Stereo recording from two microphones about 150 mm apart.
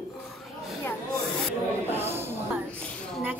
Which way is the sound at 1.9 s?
15° right (ahead or behind).